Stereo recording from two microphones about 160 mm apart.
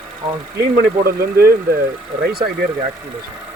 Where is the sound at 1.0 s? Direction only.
70° right (ahead or behind).